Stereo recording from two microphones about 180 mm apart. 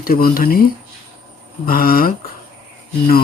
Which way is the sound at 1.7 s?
55° left (ahead or behind).